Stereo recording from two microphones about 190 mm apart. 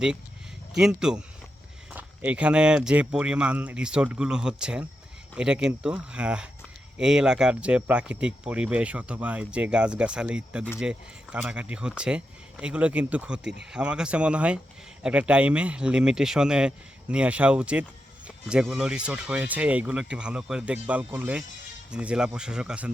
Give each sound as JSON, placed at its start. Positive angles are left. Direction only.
{"t": 0.7, "sound": "speech", "side_deg": 0}
{"t": 13.4, "sound": "speech", "side_deg": -65}
{"t": 13.7, "sound": "speech", "side_deg": -5}